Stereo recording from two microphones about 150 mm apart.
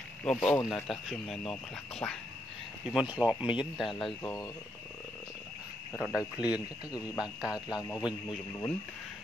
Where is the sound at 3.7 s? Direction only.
Centre (ahead or behind).